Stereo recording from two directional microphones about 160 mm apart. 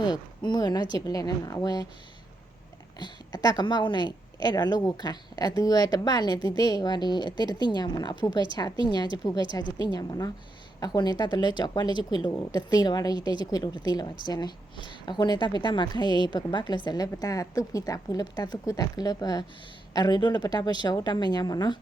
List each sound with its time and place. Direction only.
0.0 s a woman's voice: 25° left (ahead or behind)
3.0 s a woman's voice: 25° left (ahead or behind)